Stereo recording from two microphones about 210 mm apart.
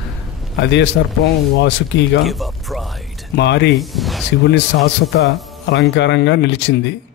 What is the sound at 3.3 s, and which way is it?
Speech, 55° left (ahead or behind).